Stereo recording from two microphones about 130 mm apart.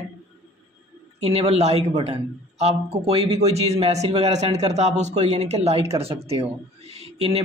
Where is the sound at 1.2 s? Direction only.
55° right (ahead or behind).